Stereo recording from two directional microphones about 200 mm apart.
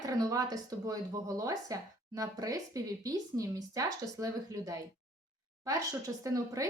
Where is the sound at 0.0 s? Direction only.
20° right (ahead or behind).